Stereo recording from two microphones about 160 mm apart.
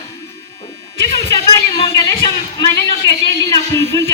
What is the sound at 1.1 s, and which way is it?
A woman's voice, 25° left (ahead or behind).